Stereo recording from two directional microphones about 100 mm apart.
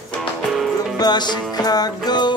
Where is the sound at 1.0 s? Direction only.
45° left (ahead or behind).